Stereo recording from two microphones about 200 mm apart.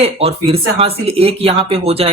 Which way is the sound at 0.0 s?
30° right (ahead or behind).